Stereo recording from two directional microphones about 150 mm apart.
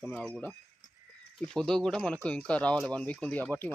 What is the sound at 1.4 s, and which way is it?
Speech, 5° left (ahead or behind).